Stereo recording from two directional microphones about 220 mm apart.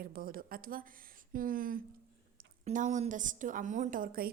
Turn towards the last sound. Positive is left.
turn(degrees=-40)  # may be behind; listen again after turning